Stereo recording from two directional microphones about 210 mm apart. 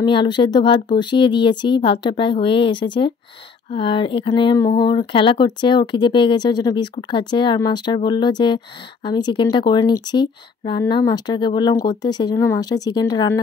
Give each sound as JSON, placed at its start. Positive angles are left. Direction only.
{"t": 0.0, "sound": "speech", "side_deg": 20}